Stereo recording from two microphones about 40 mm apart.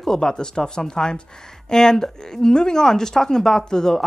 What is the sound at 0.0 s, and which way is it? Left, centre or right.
Speech, centre.